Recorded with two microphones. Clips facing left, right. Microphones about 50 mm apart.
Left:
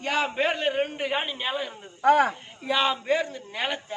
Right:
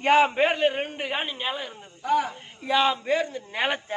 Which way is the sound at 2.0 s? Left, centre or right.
Left.